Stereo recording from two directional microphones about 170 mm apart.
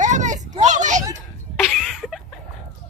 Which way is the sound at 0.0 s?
45° right (ahead or behind).